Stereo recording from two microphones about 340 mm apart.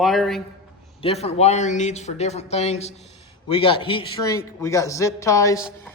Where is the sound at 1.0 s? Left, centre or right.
Centre.